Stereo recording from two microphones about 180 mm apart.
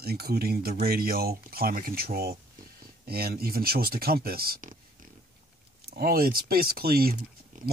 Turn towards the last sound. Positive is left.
turn(degrees=-55)  # may be behind; listen again after turning